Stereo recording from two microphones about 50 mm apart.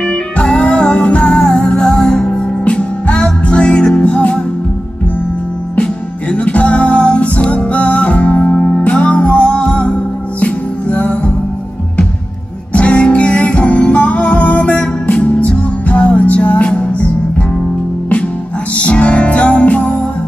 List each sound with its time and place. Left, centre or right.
0.0 s music: centre
6.2 s music: left
12.7 s music: left
18.8 s music: left